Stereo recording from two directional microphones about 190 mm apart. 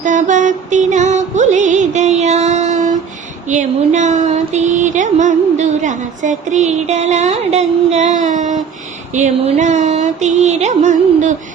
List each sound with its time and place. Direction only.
0.0 s music: 40° right (ahead or behind)
3.4 s a sound: 40° right (ahead or behind)
9.1 s music: 40° right (ahead or behind)